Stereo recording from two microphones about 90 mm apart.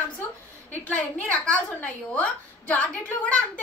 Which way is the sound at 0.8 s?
15° left (ahead or behind).